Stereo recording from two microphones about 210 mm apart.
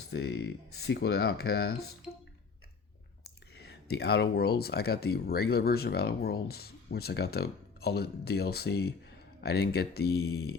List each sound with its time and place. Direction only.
0.1 s speech: 50° left (ahead or behind)
3.7 s speech: 50° left (ahead or behind)